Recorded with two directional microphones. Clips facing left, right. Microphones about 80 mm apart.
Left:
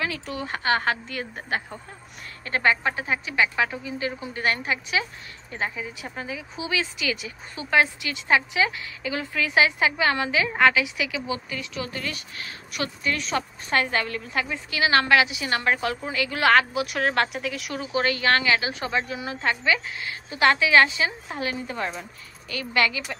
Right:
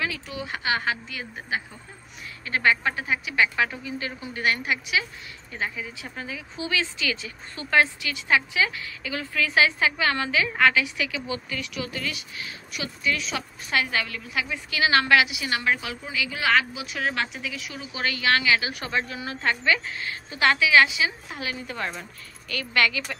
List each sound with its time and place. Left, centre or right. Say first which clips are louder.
0.3 s a woman's voice: left 6 dB; left
2.4 s a woman's voice: even; left
3.3 s speech: even; centre; by 14.5 s left
14.5 s a woman's voice: even; left
16.1 s a woman's voice: left 3 dB; left
17.7 s a woman's voice: left 6 dB; left
21.6 s speech: left 2 dB; centre